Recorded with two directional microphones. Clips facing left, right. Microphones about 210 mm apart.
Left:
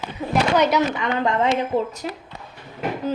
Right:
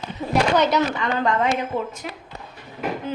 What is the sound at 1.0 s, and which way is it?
A woman's voice, 20° left (ahead or behind).